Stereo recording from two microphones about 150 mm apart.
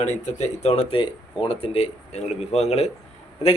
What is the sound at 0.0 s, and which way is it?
A man's voice, 50° left (ahead or behind).